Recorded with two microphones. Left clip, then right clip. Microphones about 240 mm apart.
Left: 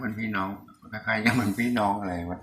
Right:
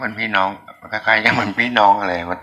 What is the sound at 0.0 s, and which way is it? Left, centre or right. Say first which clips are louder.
Speech: right 12 dB; right.